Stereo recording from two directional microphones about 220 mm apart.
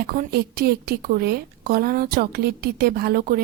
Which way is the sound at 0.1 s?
45° right (ahead or behind).